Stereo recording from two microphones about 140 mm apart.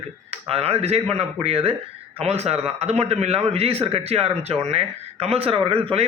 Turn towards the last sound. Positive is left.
turn(degrees=-40)  # may be behind; listen again after turning